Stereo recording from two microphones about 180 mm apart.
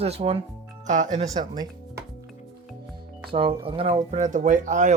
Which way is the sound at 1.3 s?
20° right (ahead or behind).